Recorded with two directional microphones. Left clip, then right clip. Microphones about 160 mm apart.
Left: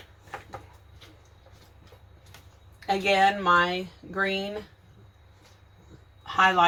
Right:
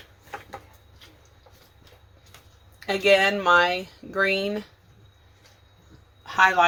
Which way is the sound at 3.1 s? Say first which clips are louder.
Right 3 dB; 50° right (ahead or behind).